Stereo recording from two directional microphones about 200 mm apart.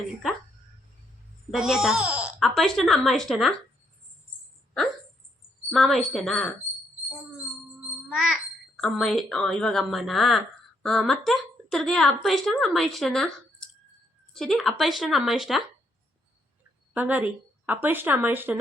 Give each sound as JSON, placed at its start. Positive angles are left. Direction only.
{"t": 1.5, "sound": "a woman's voice", "side_deg": 0}
{"t": 5.7, "sound": "a woman's voice", "side_deg": 0}
{"t": 8.1, "sound": "a woman's voice", "side_deg": 0}
{"t": 14.3, "sound": "a woman's voice", "side_deg": 0}
{"t": 16.9, "sound": "speech", "side_deg": -10}